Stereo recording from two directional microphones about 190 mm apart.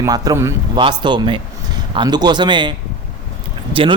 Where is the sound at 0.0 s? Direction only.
20° right (ahead or behind).